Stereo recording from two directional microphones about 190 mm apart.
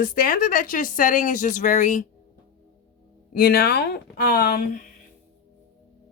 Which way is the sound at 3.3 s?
55° left (ahead or behind).